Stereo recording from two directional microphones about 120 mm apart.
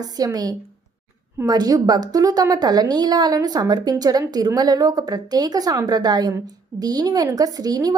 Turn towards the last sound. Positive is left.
turn(degrees=-30)  # may be behind; listen again after turning